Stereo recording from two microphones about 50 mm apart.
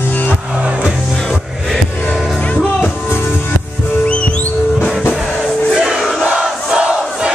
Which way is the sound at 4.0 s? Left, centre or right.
Left.